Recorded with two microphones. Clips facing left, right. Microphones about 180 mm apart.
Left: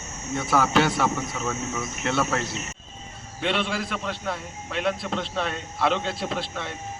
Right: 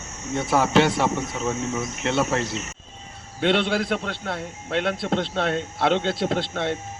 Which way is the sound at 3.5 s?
70° right (ahead or behind).